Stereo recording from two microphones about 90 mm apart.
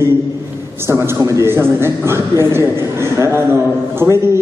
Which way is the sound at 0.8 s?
30° right (ahead or behind).